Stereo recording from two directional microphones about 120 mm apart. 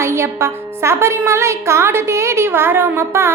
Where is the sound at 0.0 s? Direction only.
20° right (ahead or behind).